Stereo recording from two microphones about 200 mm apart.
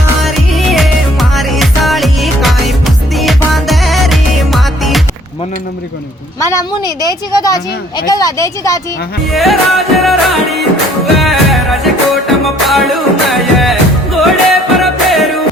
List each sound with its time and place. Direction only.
0.3 s music: centre (ahead or behind)
6.4 s speech: 15° left (ahead or behind)
9.3 s music: centre (ahead or behind)